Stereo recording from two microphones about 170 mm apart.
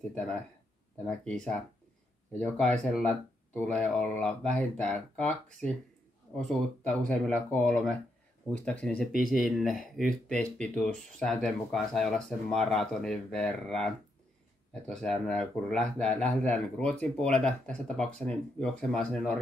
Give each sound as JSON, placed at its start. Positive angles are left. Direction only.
{"t": 0.1, "sound": "speech", "side_deg": 10}
{"t": 9.1, "sound": "speech", "side_deg": 55}
{"t": 9.4, "sound": "speech", "side_deg": 0}